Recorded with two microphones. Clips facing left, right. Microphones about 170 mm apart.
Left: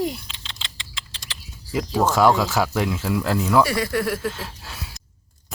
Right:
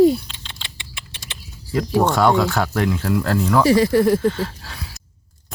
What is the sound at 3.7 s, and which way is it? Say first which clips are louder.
Speech: right 9 dB; 25° right (ahead or behind).